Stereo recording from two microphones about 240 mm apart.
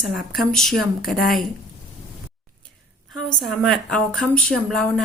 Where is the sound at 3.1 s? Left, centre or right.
Centre.